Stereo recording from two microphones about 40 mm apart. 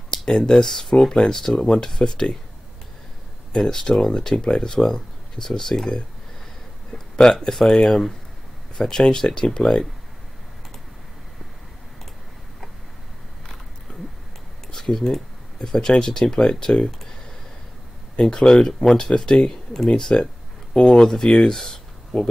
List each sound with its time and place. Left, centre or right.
0.2 s speech: centre
3.5 s speech: centre
14.7 s speech: centre
18.3 s speech: centre